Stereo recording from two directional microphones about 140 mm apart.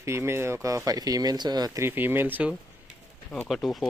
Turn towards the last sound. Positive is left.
turn(degrees=0)  # may be behind; listen again after turning